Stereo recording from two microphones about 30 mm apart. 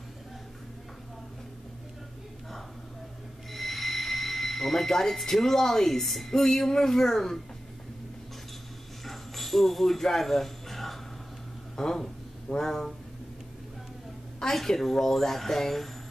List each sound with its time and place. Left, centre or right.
3.5 s speech: centre
9.0 s a sound: centre
11.7 s speech: centre
14.5 s speech: centre